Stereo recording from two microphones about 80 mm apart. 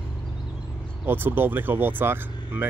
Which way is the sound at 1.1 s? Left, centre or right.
Right.